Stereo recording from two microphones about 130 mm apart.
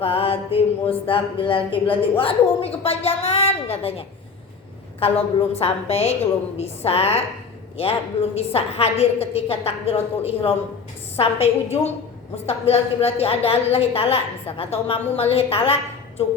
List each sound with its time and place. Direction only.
0.0 s speech: 45° left (ahead or behind)